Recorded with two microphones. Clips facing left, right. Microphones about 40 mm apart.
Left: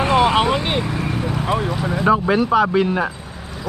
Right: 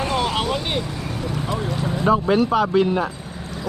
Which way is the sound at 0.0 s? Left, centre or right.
Left.